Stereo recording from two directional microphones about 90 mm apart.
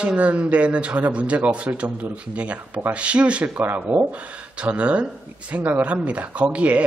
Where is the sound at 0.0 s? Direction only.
15° right (ahead or behind).